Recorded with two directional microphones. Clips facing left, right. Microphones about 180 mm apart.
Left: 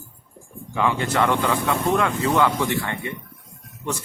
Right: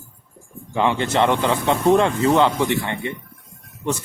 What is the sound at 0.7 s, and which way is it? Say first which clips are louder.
Speech: right 3 dB; 25° right (ahead or behind).